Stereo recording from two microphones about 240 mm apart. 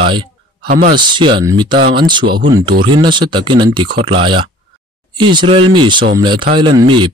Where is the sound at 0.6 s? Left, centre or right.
Right.